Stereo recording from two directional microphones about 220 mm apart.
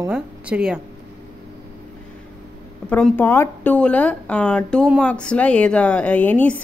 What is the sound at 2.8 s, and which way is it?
Speech, 10° left (ahead or behind).